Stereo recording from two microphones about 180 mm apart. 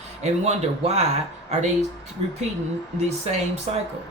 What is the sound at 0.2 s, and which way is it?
Speech, 40° right (ahead or behind).